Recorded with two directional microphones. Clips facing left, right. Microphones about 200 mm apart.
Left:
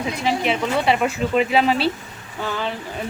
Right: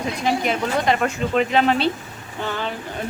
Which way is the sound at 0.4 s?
5° left (ahead or behind).